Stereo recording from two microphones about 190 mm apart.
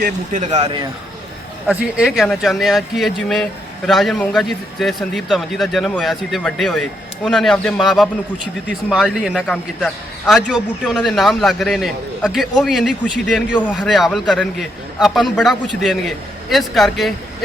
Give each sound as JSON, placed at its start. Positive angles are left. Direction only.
{"t": 0.0, "sound": "speech", "side_deg": -40}
{"t": 1.6, "sound": "a man's voice", "side_deg": -5}